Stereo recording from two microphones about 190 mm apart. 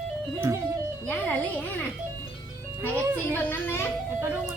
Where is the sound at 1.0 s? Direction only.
10° left (ahead or behind).